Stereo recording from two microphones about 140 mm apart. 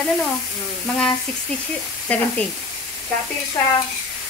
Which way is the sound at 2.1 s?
10° left (ahead or behind).